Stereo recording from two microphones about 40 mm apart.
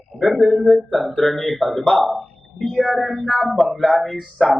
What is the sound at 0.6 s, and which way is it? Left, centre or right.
Speech, centre.